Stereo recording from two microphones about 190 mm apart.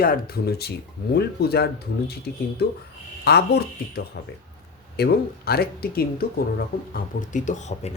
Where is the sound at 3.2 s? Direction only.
55° left (ahead or behind).